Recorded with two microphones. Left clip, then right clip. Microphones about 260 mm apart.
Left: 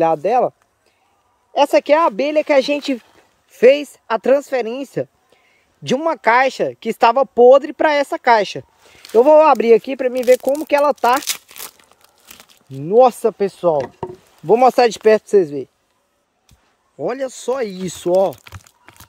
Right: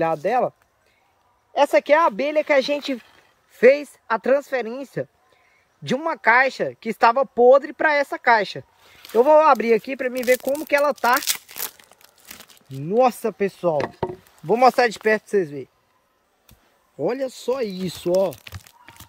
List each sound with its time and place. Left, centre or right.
0.0 s speech: left
11.2 s tearing: centre
12.7 s speech: left
13.8 s chop: centre
14.4 s speech: left
17.0 s speech: centre